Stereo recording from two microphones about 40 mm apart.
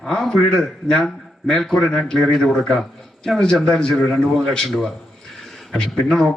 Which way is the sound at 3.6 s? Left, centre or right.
Left.